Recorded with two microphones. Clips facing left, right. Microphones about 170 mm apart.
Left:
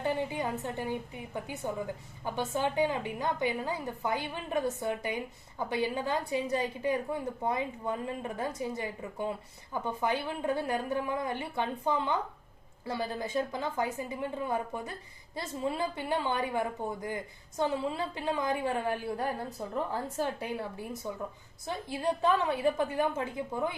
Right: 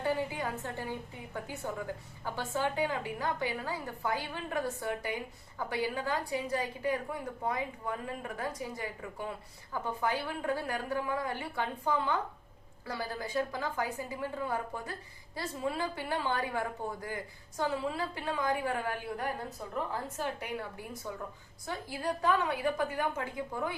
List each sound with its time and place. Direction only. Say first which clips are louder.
0.0 s a woman's voice: left 1 dB; 20° left (ahead or behind)